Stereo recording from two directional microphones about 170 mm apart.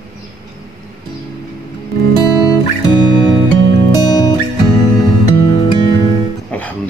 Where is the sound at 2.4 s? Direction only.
25° left (ahead or behind).